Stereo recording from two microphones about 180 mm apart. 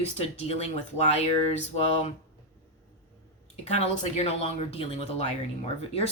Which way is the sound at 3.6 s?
35° left (ahead or behind).